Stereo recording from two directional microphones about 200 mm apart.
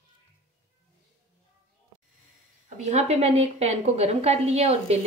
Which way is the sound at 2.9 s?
30° right (ahead or behind).